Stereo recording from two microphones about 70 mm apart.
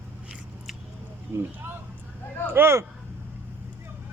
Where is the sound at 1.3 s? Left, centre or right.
Right.